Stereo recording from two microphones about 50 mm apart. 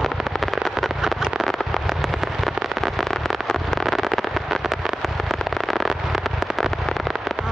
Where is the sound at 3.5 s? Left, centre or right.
Centre.